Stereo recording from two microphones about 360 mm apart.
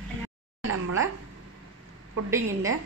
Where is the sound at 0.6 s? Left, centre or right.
Right.